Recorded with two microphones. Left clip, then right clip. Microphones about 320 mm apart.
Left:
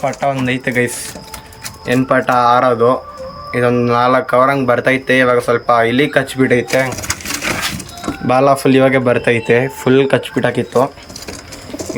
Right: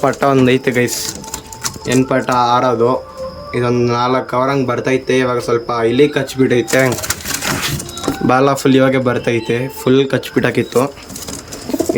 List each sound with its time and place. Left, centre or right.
0.0 s speech: centre
1.9 s speech: centre
6.7 s speech: centre
8.3 s speech: centre